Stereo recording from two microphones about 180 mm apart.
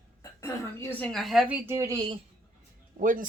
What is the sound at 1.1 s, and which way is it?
A woman's voice, centre (ahead or behind).